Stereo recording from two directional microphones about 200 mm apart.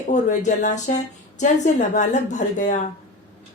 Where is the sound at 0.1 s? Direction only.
40° left (ahead or behind).